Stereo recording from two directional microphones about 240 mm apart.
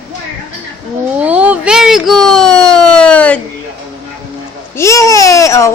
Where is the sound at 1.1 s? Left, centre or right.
Centre.